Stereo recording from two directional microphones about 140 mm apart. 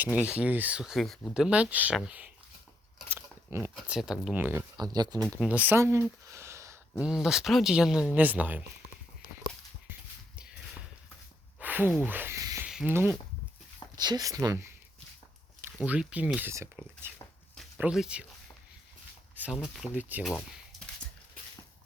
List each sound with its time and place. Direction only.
0.0 s speech: 10° right (ahead or behind)
4.4 s speech: 15° right (ahead or behind)
4.8 s speech: 30° right (ahead or behind)
5.2 s speech: 5° right (ahead or behind)
7.0 s speech: 5° right (ahead or behind)
10.3 s horse: 5° right (ahead or behind)
11.6 s a sound: 15° right (ahead or behind)
12.6 s speech: 5° right (ahead or behind)
13.9 s speech: 30° right (ahead or behind)
15.6 s speech: 10° right (ahead or behind)
17.7 s speech: 5° right (ahead or behind)
19.7 s speech: 5° right (ahead or behind)